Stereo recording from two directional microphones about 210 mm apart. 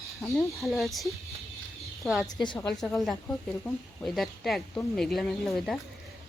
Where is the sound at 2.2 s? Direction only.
20° left (ahead or behind).